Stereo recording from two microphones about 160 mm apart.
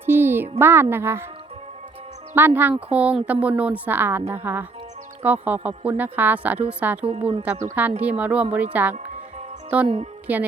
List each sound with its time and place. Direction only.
0.0 s music: 15° right (ahead or behind)
0.6 s speech: 15° right (ahead or behind)
2.3 s speech: 10° right (ahead or behind)
7.0 s a woman's voice: 35° right (ahead or behind)
7.4 s speech: 10° right (ahead or behind)
9.8 s a woman's voice: 35° right (ahead or behind)
10.3 s speech: 10° right (ahead or behind)